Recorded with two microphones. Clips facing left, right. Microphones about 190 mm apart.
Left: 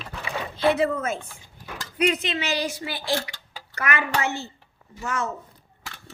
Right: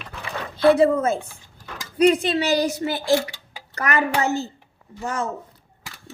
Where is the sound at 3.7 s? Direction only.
40° right (ahead or behind).